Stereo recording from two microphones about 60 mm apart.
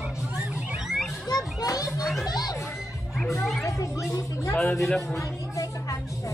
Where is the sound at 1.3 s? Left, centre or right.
Left.